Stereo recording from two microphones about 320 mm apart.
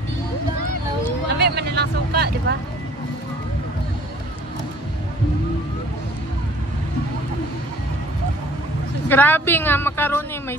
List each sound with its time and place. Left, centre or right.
1.4 s vehicle: right
9.1 s a woman's voice: centre